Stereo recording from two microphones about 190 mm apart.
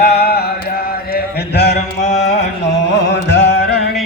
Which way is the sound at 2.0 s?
35° left (ahead or behind).